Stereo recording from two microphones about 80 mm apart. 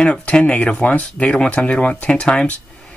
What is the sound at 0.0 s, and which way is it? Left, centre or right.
Speech, centre.